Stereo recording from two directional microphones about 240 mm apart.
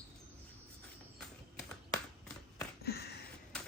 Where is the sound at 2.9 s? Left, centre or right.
Left.